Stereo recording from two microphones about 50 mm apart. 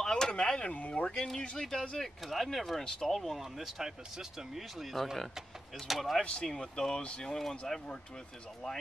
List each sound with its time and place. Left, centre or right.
0.0 s a sound: centre
0.7 s speech: left
1.0 s speech: centre
1.4 s speech: left
2.2 s speech: centre
6.4 s speech: centre